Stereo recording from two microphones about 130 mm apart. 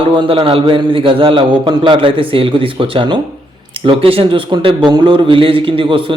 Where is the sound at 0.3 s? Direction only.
40° right (ahead or behind).